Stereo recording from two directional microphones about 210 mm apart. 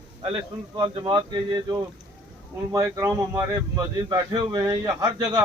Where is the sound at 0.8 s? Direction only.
20° right (ahead or behind).